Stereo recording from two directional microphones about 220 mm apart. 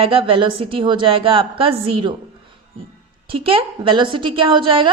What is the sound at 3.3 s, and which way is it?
A woman's voice, 25° right (ahead or behind).